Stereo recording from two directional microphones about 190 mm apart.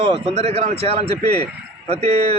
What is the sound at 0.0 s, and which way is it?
A man's voice, 30° right (ahead or behind).